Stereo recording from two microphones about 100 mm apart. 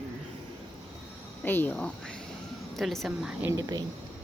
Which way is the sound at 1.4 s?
20° left (ahead or behind).